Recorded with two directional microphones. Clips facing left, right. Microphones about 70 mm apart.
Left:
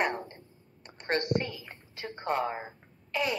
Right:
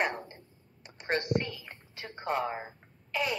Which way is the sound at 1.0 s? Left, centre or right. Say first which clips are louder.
Left 1 dB; centre.